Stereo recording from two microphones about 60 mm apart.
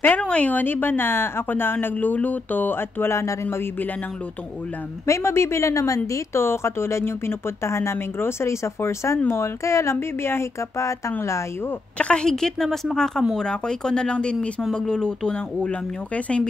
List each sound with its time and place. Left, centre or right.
0.2 s a woman's voice: left
3.4 s a woman's voice: left
5.0 s a woman's voice: left
6.3 s speech: left
12.0 s speech: centre